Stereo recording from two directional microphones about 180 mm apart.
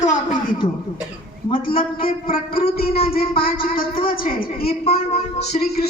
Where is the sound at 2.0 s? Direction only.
30° left (ahead or behind).